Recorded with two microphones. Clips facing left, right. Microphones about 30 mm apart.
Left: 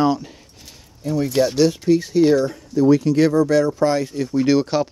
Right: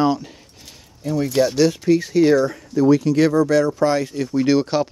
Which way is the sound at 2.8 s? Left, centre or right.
Right.